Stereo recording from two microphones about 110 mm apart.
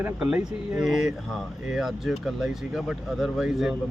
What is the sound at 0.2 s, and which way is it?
Speech, 10° right (ahead or behind).